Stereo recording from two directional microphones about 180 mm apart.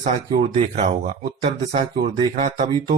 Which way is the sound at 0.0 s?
35° right (ahead or behind).